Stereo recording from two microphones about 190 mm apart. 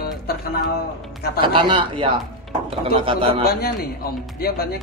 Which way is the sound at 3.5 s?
55° left (ahead or behind).